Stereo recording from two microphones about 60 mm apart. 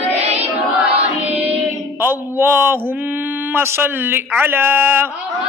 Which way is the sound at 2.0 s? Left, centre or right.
Right.